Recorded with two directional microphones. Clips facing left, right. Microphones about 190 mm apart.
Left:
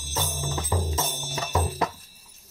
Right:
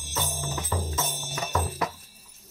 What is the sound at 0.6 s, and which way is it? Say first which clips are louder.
Music: left 2 dB; 20° left (ahead or behind).